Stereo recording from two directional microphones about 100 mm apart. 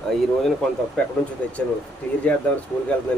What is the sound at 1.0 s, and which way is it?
Speech, 10° left (ahead or behind).